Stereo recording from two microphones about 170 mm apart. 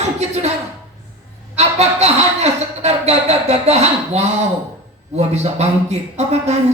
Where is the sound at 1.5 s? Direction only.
40° right (ahead or behind).